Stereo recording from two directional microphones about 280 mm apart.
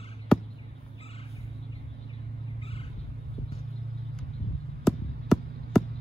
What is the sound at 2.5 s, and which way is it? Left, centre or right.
Vehicle, centre.